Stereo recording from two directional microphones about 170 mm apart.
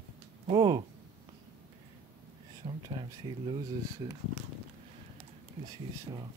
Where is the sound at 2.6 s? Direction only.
30° right (ahead or behind).